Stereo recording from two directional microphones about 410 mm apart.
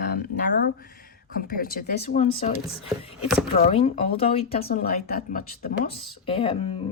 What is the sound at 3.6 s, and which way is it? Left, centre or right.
A woman's voice, centre.